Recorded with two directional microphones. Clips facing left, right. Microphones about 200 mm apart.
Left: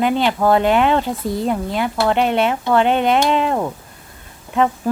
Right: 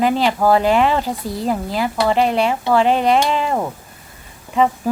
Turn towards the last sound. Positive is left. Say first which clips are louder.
# right 1 dB
turn(degrees=0)  # may be behind; listen again after turning